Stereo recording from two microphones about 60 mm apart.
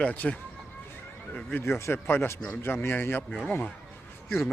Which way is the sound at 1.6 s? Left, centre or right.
Left.